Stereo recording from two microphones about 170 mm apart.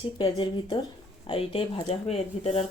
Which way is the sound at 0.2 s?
30° left (ahead or behind).